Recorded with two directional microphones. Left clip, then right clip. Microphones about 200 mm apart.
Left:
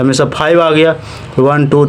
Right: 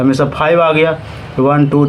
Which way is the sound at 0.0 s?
45° left (ahead or behind).